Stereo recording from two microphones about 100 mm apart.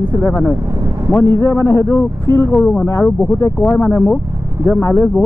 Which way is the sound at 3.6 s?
20° left (ahead or behind).